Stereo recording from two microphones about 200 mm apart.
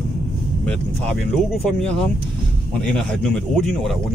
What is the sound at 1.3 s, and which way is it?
Speech, centre (ahead or behind).